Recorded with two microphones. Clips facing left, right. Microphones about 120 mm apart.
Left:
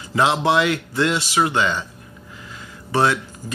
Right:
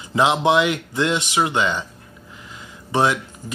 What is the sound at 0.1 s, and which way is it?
Speech, 20° right (ahead or behind).